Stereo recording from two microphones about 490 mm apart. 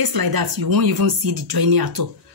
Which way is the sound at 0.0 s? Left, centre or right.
Right.